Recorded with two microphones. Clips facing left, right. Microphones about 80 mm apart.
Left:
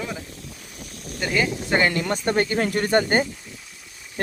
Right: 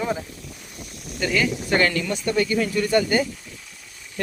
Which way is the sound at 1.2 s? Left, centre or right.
Left.